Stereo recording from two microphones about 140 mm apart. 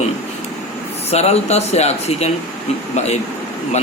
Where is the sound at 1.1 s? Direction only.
50° left (ahead or behind).